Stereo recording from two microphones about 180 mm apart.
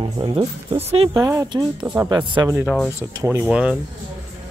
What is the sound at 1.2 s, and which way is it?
Speech, 15° right (ahead or behind).